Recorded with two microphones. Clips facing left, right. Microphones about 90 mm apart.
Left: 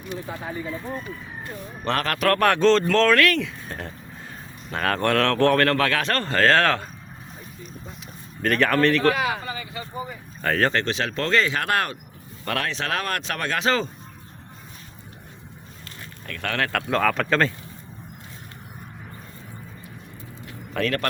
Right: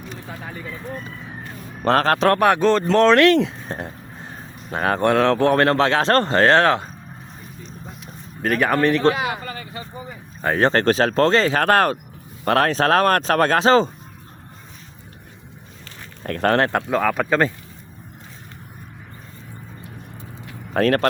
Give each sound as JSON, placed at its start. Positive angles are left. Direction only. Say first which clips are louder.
{"t": 1.8, "sound": "speech", "louder": "right 7 dB", "side_deg": -35}
{"t": 2.4, "sound": "speech", "louder": "right 1 dB", "side_deg": -15}
{"t": 8.4, "sound": "speech", "louder": "right 1 dB", "side_deg": -10}
{"t": 9.4, "sound": "speech", "louder": "even", "side_deg": -45}
{"t": 10.4, "sound": "speech", "louder": "right 3 dB", "side_deg": -20}
{"t": 10.7, "sound": "speech", "louder": "right 8 dB", "side_deg": -40}
{"t": 16.2, "sound": "speech", "louder": "right 9 dB", "side_deg": -40}
{"t": 16.9, "sound": "speech", "louder": "right 2 dB", "side_deg": -10}
{"t": 20.7, "sound": "speech", "louder": "right 7 dB", "side_deg": -40}